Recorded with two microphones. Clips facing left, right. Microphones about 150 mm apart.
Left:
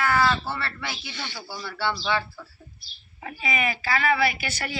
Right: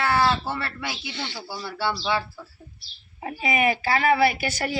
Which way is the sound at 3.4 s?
45° right (ahead or behind).